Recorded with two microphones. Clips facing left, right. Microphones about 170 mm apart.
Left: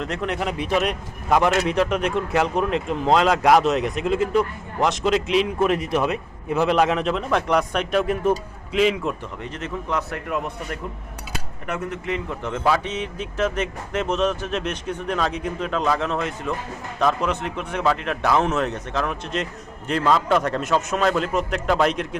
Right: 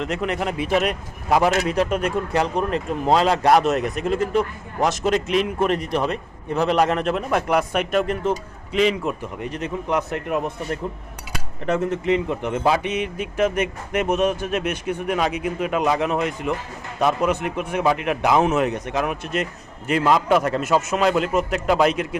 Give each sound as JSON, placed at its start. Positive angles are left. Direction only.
{"t": 0.0, "sound": "a man's voice", "side_deg": 0}
{"t": 9.4, "sound": "speech", "side_deg": -15}